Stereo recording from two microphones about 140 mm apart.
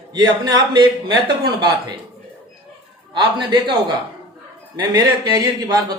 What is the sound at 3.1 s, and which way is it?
Speech, 35° right (ahead or behind).